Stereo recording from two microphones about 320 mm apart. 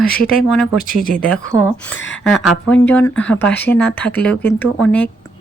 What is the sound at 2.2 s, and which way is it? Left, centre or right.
Speech, centre.